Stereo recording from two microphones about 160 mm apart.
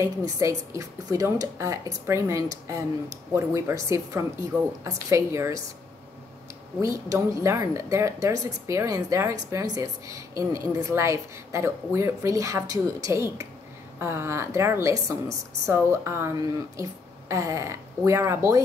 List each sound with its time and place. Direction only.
0.0 s a woman's voice: 20° right (ahead or behind)
6.8 s a woman's voice: 20° right (ahead or behind)